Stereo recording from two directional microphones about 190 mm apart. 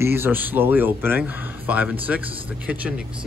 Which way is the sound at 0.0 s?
10° right (ahead or behind).